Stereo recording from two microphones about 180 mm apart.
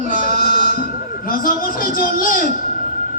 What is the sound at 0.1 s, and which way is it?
Sheep, 50° left (ahead or behind).